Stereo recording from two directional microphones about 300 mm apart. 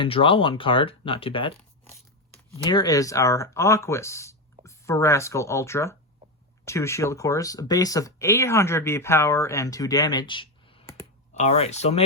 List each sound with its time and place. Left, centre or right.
0.0 s speech: centre